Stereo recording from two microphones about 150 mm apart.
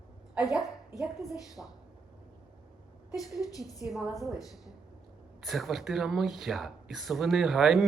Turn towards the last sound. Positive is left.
turn(degrees=-5)  # may be behind; listen again after turning